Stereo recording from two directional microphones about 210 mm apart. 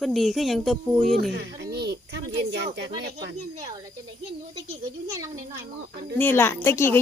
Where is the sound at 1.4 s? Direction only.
50° right (ahead or behind).